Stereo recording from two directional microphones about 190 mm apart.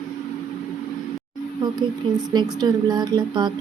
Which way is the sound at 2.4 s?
20° right (ahead or behind).